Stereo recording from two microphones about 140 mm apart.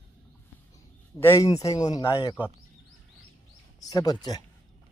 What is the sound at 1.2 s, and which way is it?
Speech, 20° left (ahead or behind).